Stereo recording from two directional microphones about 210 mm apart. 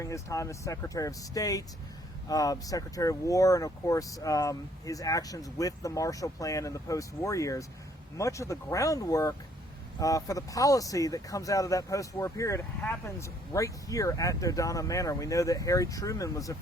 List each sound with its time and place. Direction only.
0.0 s speech: 15° left (ahead or behind)